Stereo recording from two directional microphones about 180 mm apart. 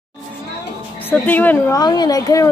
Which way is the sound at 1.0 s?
10° left (ahead or behind).